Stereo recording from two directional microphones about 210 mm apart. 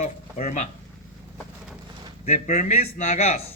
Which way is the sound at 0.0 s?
35° left (ahead or behind).